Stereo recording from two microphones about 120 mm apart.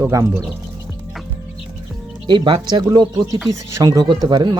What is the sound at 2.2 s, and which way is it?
Speech, 40° right (ahead or behind).